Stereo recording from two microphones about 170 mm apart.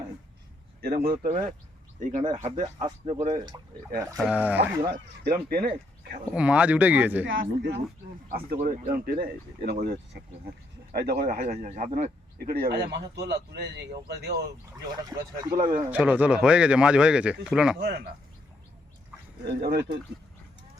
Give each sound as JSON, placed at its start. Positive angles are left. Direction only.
{"t": 1.0, "sound": "speech", "side_deg": -60}
{"t": 2.3, "sound": "speech", "side_deg": -35}
{"t": 4.2, "sound": "speech", "side_deg": -5}
{"t": 4.9, "sound": "speech", "side_deg": -65}
{"t": 6.3, "sound": "speech", "side_deg": -5}
{"t": 7.3, "sound": "speech", "side_deg": -85}
{"t": 8.3, "sound": "speech", "side_deg": -60}
{"t": 15.6, "sound": "speech", "side_deg": -25}
{"t": 15.9, "sound": "speech", "side_deg": -10}
{"t": 17.7, "sound": "speech", "side_deg": -65}
{"t": 19.5, "sound": "speech", "side_deg": -65}